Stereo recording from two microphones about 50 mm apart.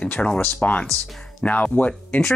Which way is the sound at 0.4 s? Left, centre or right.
Left.